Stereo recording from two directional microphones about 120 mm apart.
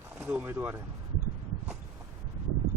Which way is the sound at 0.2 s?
15° right (ahead or behind).